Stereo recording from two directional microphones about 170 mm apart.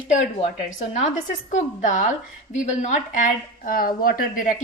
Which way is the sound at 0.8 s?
45° left (ahead or behind).